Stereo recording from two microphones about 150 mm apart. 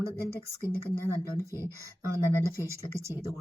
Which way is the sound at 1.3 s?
20° right (ahead or behind).